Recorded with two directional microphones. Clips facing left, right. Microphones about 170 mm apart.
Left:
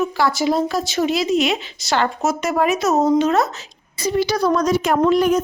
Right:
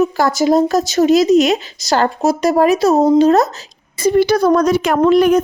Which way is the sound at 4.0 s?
55° right (ahead or behind).